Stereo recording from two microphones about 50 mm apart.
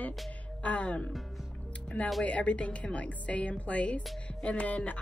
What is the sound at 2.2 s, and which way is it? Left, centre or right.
Speech, left.